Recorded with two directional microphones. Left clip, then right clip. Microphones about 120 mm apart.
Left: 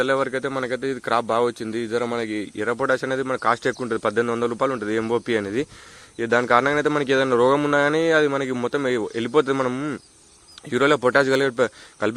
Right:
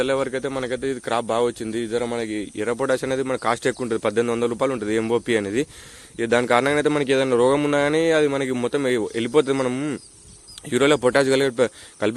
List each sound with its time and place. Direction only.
0.0 s speech: 15° right (ahead or behind)
2.6 s speech: 25° right (ahead or behind)
7.1 s speech: 25° right (ahead or behind)